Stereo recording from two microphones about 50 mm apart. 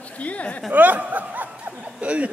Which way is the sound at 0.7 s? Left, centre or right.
Right.